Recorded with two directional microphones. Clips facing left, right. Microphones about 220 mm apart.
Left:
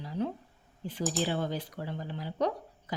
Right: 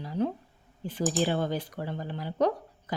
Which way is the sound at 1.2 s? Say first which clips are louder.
Right 3 dB; 55° right (ahead or behind).